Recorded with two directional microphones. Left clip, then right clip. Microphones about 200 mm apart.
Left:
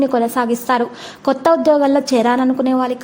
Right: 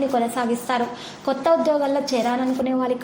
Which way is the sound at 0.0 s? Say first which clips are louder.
Left 6 dB; 45° left (ahead or behind).